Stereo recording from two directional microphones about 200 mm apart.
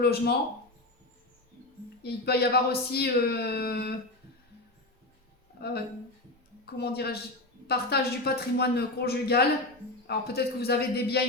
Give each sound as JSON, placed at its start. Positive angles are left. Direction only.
{"t": 0.0, "sound": "speech", "side_deg": 50}
{"t": 2.0, "sound": "speech", "side_deg": 55}
{"t": 5.5, "sound": "speech", "side_deg": 50}